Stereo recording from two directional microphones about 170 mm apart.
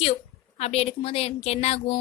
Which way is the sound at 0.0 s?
35° left (ahead or behind).